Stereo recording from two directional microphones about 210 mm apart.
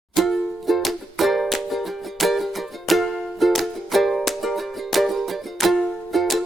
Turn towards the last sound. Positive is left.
turn(degrees=0)  # may be behind; listen again after turning